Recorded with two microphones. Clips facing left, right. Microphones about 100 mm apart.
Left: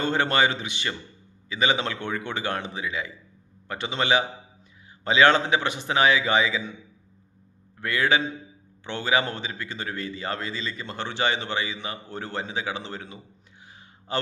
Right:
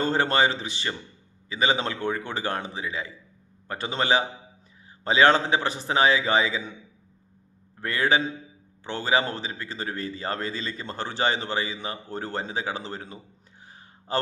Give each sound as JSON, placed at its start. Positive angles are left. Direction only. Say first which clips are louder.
{"t": 0.0, "sound": "a man's voice", "louder": "even", "side_deg": -35}
{"t": 7.8, "sound": "a man's voice", "louder": "even", "side_deg": -35}